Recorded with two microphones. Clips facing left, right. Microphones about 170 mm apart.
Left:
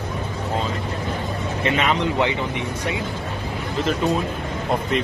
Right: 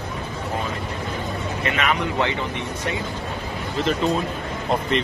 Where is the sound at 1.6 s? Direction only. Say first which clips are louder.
Left 3 dB; 30° left (ahead or behind).